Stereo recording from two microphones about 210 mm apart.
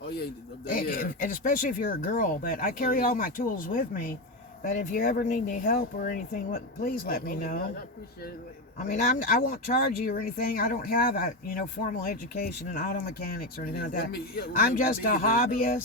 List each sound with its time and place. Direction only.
0.7 s speech: 40° left (ahead or behind)